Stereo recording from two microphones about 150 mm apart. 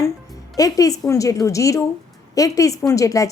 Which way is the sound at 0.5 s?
25° left (ahead or behind).